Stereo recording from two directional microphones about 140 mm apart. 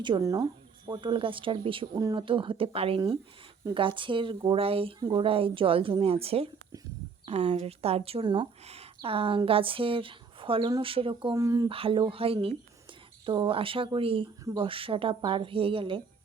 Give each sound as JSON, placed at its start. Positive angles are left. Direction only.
{"t": 0.0, "sound": "speech", "side_deg": -30}
{"t": 4.9, "sound": "speech", "side_deg": -25}
{"t": 5.2, "sound": "speech", "side_deg": -40}
{"t": 8.6, "sound": "speech", "side_deg": -45}
{"t": 11.3, "sound": "speech", "side_deg": -25}
{"t": 11.7, "sound": "speech", "side_deg": -40}